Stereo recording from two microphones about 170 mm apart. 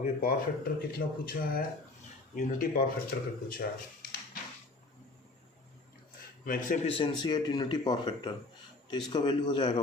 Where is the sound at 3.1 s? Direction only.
90° left.